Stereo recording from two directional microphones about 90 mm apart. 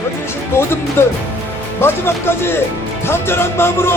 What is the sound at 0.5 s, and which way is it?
Music, 25° left (ahead or behind).